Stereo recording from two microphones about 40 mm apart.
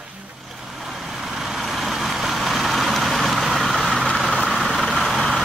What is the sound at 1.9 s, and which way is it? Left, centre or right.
Vehicle, centre.